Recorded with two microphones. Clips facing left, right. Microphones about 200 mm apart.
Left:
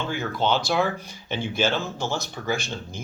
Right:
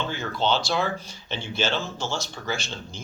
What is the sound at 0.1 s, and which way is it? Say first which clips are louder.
Speech: left 4 dB; 10° left (ahead or behind).